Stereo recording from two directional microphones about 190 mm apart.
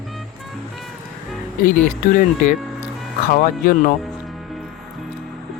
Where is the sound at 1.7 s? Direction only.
45° left (ahead or behind).